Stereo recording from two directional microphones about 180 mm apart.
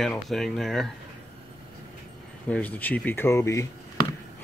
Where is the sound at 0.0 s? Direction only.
Centre (ahead or behind).